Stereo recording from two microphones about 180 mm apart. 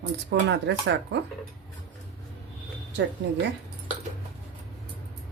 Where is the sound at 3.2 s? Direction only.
75° right (ahead or behind).